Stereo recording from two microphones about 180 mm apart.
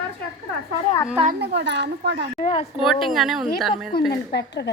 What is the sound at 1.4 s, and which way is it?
Speech, 70° right (ahead or behind).